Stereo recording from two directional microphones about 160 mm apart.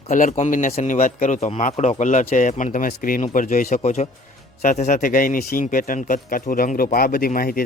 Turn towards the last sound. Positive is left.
turn(degrees=65)  # may be behind; listen again after turning